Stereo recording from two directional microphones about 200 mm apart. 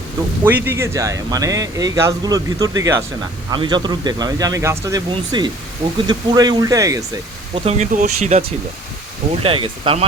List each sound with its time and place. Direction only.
0.4 s speech: 10° right (ahead or behind)
7.5 s speech: 30° right (ahead or behind)